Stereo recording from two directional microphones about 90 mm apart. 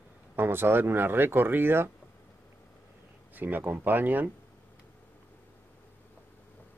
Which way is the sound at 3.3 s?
20° right (ahead or behind).